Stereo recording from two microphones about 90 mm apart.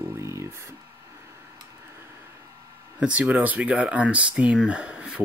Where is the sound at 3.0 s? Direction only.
15° right (ahead or behind).